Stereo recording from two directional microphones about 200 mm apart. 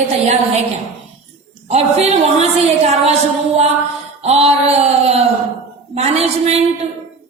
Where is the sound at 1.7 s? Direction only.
35° right (ahead or behind).